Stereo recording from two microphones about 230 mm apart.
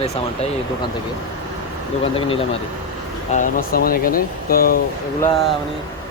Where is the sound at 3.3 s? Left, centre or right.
Left.